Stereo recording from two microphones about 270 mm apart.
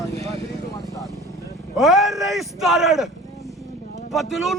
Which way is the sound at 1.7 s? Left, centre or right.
Centre.